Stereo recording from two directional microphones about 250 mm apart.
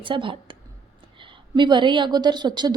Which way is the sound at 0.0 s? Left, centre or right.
Centre.